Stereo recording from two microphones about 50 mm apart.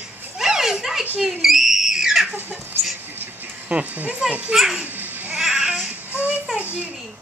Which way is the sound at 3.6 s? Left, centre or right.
Right.